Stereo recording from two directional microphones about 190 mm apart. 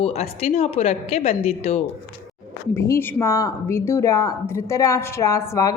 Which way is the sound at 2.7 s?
15° left (ahead or behind).